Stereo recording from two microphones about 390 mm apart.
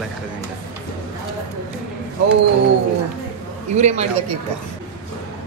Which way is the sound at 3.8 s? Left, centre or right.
Centre.